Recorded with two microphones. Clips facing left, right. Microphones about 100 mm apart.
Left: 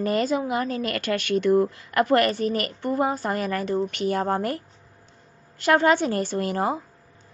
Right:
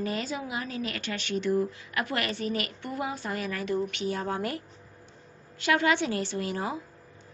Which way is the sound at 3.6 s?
35° left (ahead or behind).